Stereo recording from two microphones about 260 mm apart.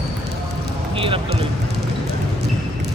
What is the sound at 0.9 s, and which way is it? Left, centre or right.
Speech, centre.